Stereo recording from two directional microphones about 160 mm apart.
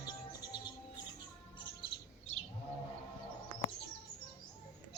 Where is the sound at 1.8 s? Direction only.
35° left (ahead or behind).